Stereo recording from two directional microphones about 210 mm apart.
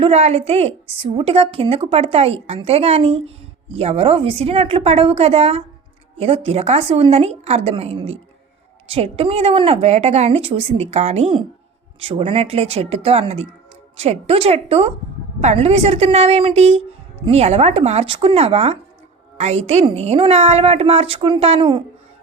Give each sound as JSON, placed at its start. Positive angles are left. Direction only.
{"t": 0.0, "sound": "a woman's voice", "side_deg": -30}